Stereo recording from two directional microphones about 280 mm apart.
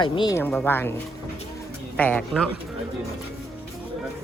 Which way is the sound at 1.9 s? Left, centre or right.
Centre.